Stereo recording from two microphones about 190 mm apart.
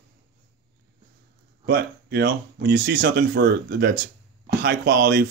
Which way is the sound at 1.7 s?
55° right (ahead or behind).